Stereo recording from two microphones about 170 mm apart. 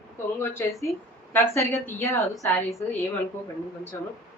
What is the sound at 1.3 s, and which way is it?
Speech, 15° left (ahead or behind).